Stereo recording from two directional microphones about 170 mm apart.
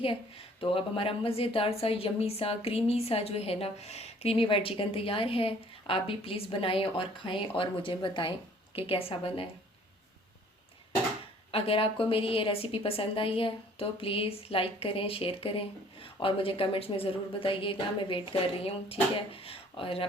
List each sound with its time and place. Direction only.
0.6 s a woman's voice: 35° left (ahead or behind)
11.5 s a woman's voice: 35° left (ahead or behind)